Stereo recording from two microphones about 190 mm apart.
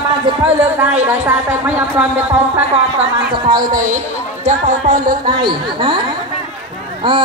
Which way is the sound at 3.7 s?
45° right (ahead or behind).